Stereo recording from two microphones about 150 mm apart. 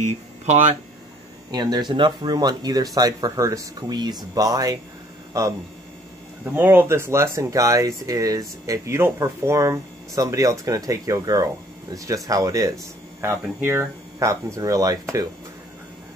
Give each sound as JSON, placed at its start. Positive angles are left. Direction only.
{"t": 0.0, "sound": "speech", "side_deg": -55}
{"t": 1.5, "sound": "speech", "side_deg": -30}